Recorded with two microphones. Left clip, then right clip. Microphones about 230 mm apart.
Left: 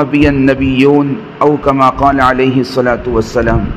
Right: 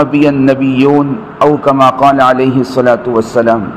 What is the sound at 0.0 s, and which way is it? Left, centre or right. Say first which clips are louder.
A man's voice: right 1 dB; left.